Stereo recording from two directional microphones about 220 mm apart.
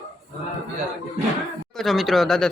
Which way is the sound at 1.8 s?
Centre (ahead or behind).